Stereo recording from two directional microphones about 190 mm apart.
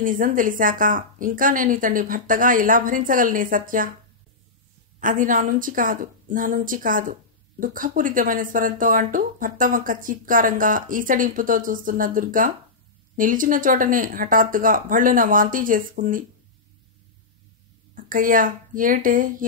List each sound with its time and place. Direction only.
0.0 s speech: 45° right (ahead or behind)
5.0 s speech: 45° right (ahead or behind)
17.9 s speech: 45° right (ahead or behind)